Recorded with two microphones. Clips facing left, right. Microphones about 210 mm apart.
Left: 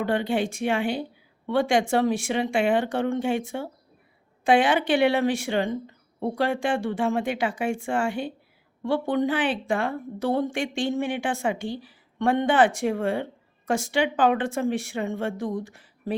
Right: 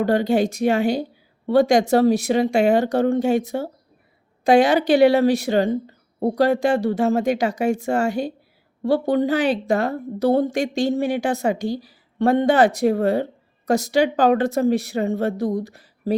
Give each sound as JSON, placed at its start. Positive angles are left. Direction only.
{"t": 0.0, "sound": "a woman's voice", "side_deg": -40}